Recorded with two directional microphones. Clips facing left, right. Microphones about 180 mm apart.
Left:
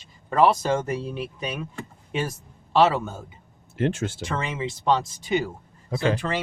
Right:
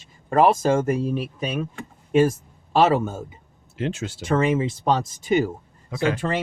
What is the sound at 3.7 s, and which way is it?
Speech, 50° left (ahead or behind).